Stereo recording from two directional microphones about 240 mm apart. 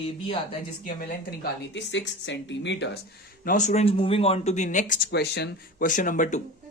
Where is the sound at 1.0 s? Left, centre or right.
Left.